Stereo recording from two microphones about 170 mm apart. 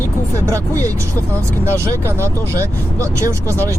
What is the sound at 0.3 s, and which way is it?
Speech, 20° right (ahead or behind).